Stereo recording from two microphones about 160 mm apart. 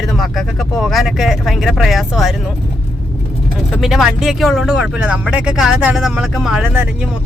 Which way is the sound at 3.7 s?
Centre (ahead or behind).